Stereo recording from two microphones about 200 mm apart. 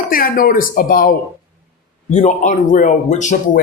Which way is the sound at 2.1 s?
35° left (ahead or behind).